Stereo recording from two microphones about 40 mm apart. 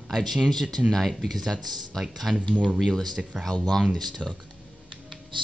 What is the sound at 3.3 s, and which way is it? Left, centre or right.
Speech, centre.